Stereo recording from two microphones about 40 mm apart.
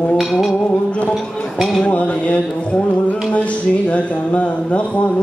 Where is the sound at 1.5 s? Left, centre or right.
Centre.